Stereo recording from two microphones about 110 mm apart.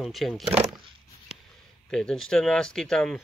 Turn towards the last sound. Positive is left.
turn(degrees=5)  # may be behind; listen again after turning